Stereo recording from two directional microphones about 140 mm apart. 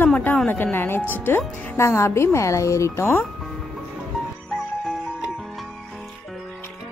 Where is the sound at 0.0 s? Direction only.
10° left (ahead or behind).